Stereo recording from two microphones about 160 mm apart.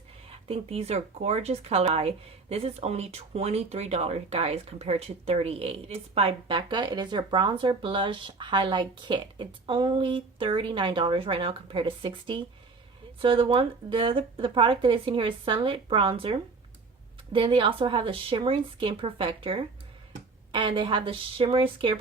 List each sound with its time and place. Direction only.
0.3 s speech: 35° right (ahead or behind)